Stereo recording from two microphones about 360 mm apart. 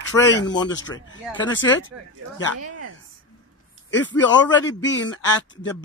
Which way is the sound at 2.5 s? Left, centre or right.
Right.